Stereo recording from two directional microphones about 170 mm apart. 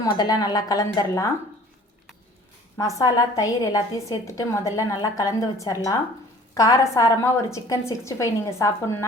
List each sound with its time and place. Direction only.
0.0 s a woman's voice: 20° left (ahead or behind)
2.7 s a woman's voice: 20° left (ahead or behind)